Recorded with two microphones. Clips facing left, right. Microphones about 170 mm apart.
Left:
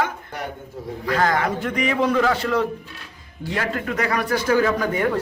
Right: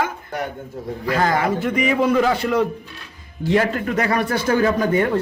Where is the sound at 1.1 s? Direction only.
10° right (ahead or behind).